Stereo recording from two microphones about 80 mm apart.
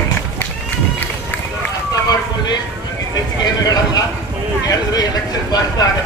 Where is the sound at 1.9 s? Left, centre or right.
Left.